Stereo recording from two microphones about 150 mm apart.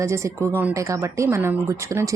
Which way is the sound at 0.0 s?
20° right (ahead or behind).